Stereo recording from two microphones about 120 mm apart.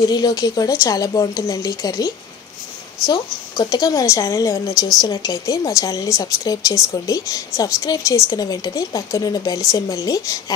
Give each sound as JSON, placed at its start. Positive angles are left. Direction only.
{"t": 0.1, "sound": "a woman's voice", "side_deg": 35}